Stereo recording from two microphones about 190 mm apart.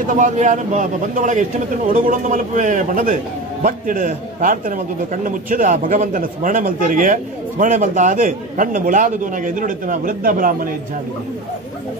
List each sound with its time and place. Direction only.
0.1 s a man's voice: 40° right (ahead or behind)